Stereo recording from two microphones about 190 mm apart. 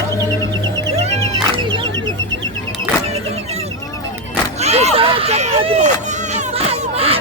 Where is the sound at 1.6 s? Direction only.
25° right (ahead or behind).